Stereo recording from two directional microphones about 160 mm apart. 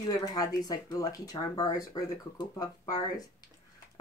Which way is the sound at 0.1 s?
25° left (ahead or behind).